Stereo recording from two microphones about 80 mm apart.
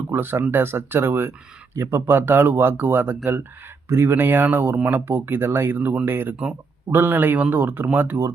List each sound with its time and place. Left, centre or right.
0.1 s speech: right